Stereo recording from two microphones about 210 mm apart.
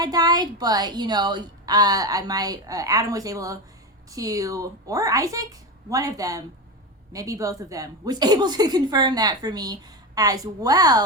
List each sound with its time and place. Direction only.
0.0 s a woman's voice: 20° right (ahead or behind)